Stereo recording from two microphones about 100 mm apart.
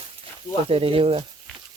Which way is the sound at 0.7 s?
65° right (ahead or behind).